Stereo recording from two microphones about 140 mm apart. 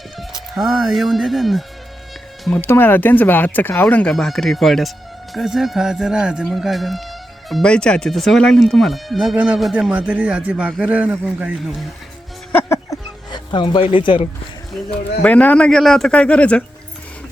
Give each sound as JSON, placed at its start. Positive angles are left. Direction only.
{"t": 0.2, "sound": "music", "side_deg": 0}
{"t": 0.8, "sound": "speech", "side_deg": -5}
{"t": 2.6, "sound": "speech", "side_deg": 15}
{"t": 12.5, "sound": "music", "side_deg": 15}
{"t": 13.3, "sound": "speech", "side_deg": 35}
{"t": 15.2, "sound": "speech", "side_deg": 10}